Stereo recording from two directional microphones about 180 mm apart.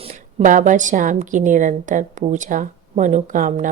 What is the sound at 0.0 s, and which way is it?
A woman's voice, 35° right (ahead or behind).